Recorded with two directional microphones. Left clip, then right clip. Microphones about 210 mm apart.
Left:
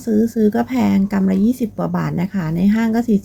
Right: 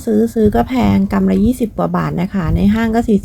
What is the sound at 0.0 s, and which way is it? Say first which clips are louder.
A woman's voice: right 4 dB; 10° right (ahead or behind).